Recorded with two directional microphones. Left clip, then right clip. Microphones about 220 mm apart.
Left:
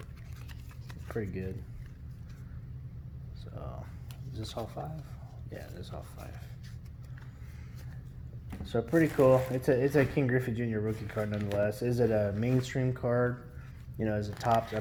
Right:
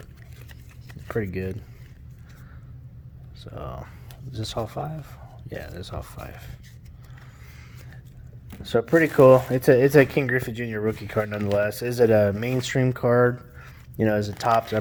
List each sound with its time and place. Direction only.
1.0 s speech: 45° right (ahead or behind)
3.4 s speech: 35° right (ahead or behind)
8.4 s speech: 40° right (ahead or behind)
11.5 s speech: 45° right (ahead or behind)